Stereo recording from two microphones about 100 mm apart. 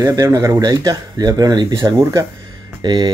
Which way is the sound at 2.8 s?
45° right (ahead or behind).